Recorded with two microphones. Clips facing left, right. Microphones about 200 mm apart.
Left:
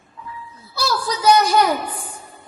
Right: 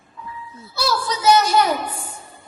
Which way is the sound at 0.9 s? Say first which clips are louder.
Left 1 dB; 25° right (ahead or behind).